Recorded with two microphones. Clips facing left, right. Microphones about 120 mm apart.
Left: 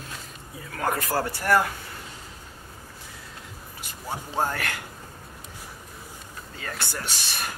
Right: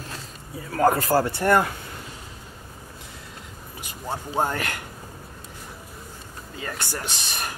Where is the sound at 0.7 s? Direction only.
30° right (ahead or behind).